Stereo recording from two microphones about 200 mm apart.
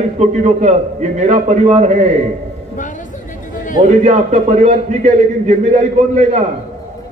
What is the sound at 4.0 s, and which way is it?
A man's voice, 35° right (ahead or behind).